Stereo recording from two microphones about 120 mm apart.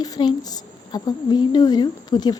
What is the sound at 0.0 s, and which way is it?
A woman's voice, 35° left (ahead or behind).